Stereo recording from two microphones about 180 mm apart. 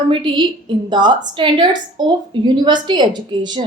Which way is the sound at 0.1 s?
25° right (ahead or behind).